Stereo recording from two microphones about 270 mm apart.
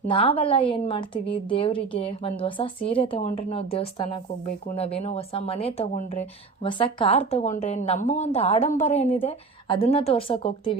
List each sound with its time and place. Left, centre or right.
0.1 s speech: left